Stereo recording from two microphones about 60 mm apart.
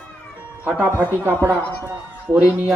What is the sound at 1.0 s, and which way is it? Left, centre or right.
Speech, right.